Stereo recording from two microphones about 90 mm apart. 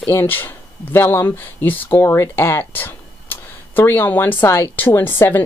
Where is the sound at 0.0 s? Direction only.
25° left (ahead or behind).